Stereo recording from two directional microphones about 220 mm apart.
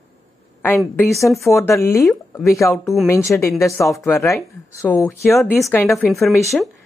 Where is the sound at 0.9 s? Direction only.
5° left (ahead or behind).